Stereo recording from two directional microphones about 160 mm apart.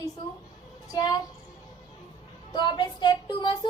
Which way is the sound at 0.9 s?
25° left (ahead or behind).